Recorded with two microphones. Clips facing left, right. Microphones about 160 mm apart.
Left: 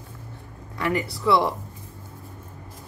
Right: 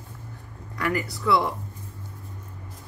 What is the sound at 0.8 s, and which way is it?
Speech, 25° left (ahead or behind).